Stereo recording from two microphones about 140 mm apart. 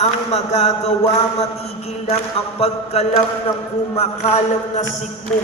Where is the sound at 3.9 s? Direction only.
45° left (ahead or behind).